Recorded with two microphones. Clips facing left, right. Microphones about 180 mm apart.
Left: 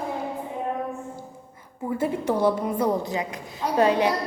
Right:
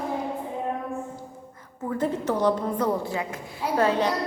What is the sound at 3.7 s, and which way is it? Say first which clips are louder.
Speech: left 2 dB; 15° left (ahead or behind).